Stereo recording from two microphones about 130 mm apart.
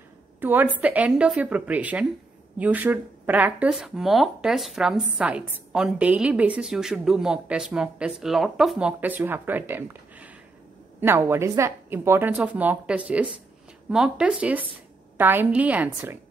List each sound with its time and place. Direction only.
0.4 s speech: 15° right (ahead or behind)